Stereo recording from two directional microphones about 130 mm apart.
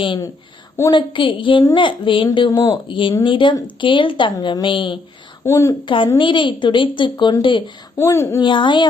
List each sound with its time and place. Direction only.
0.9 s a woman's voice: 40° left (ahead or behind)
5.5 s speech: 20° left (ahead or behind)
5.8 s a woman's voice: 40° left (ahead or behind)
7.9 s speech: 20° left (ahead or behind)
8.4 s a woman's voice: 40° left (ahead or behind)